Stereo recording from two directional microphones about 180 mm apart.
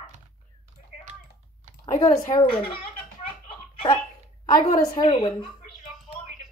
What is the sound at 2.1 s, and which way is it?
Speech, 20° left (ahead or behind).